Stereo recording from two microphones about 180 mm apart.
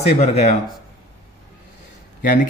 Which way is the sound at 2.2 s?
50° left (ahead or behind).